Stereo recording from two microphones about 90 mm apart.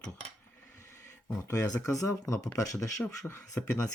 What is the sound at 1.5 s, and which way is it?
Speech, 35° left (ahead or behind).